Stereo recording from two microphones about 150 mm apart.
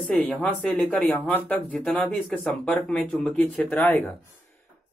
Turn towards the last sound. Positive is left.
turn(degrees=15)  # may be behind; listen again after turning